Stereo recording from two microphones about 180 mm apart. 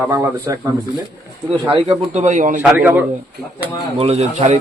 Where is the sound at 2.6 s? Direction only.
10° right (ahead or behind).